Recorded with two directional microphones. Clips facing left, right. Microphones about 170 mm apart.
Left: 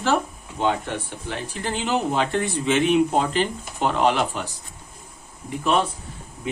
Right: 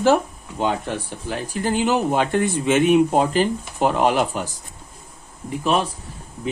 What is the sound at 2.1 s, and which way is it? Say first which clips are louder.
Speech: right 3 dB; 50° right (ahead or behind).